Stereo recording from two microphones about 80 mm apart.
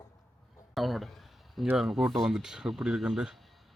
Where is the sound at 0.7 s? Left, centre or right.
Centre.